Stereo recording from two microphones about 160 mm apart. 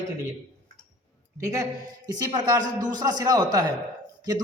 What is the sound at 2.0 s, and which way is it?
Speech, 25° right (ahead or behind).